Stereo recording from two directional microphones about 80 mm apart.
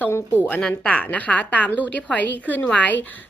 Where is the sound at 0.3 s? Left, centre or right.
Left.